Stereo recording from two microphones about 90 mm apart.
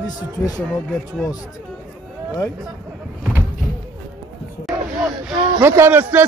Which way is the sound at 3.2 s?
25° right (ahead or behind).